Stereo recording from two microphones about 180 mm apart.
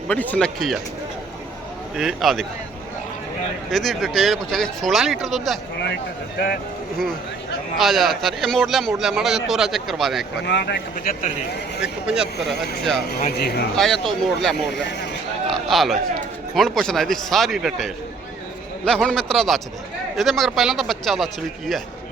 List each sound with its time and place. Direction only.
0.1 s a man's voice: 10° left (ahead or behind)
2.0 s a man's voice: centre (ahead or behind)
3.7 s a man's voice: centre (ahead or behind)
7.8 s a man's voice: centre (ahead or behind)
10.4 s speech: 70° left (ahead or behind); by 11.3 s 55° left (ahead or behind)
11.8 s a man's voice: 5° right (ahead or behind)
13.1 s speech: 60° left (ahead or behind)
13.7 s a man's voice: centre (ahead or behind)
14.7 s speech: 70° left (ahead or behind)
15.4 s a sound: centre (ahead or behind)
16.6 s a man's voice: centre (ahead or behind)